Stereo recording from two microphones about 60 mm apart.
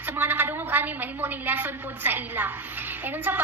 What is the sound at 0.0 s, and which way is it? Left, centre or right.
A woman's voice, right.